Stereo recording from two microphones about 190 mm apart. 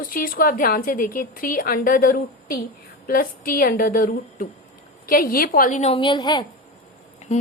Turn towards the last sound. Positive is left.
turn(degrees=35)  # may be behind; listen again after turning